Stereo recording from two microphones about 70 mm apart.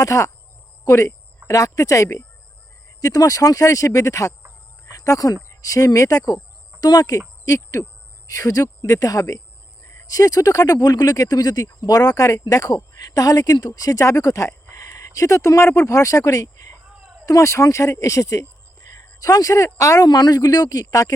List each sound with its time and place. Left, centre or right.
0.0 s speech: left
7.4 s hoot: left
8.3 s speech: left
20.1 s speech: left